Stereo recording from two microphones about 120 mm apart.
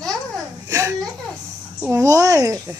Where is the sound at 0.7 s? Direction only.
25° right (ahead or behind).